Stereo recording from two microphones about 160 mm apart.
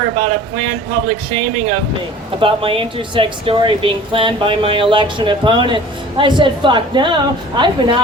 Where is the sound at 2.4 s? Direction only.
35° right (ahead or behind).